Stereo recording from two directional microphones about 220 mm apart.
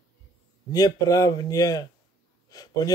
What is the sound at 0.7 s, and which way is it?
Speech, 15° left (ahead or behind).